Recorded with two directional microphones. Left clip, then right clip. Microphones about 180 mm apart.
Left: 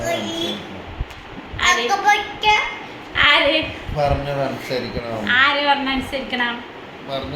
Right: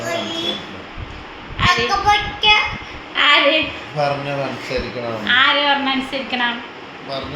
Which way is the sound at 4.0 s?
10° left (ahead or behind).